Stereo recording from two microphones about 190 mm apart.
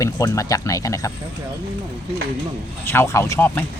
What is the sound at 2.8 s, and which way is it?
Speech, 10° left (ahead or behind).